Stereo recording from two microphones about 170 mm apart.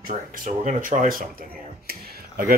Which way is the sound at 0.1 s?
50° right (ahead or behind).